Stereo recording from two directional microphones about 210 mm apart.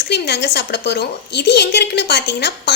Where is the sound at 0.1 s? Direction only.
55° left (ahead or behind).